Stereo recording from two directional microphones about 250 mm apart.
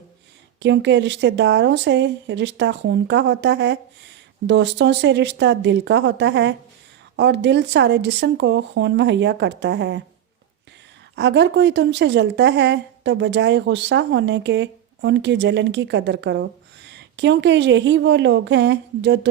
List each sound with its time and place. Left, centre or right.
0.6 s a woman's voice: right
11.1 s a woman's voice: right